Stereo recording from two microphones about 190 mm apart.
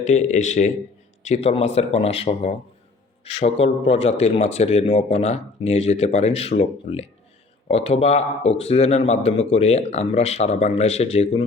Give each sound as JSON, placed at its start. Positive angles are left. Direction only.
{"t": 0.0, "sound": "speech", "side_deg": 40}